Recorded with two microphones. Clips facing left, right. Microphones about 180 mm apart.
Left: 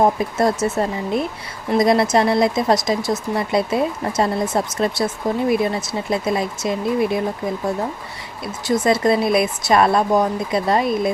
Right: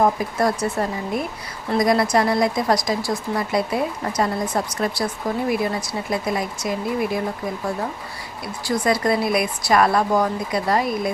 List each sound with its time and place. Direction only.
0.0 s speech: 25° left (ahead or behind)
8.6 s speech: 25° left (ahead or behind)